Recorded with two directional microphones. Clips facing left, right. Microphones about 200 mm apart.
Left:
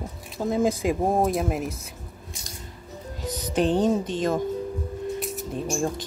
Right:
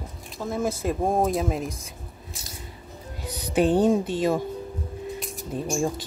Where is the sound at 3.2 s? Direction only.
10° right (ahead or behind).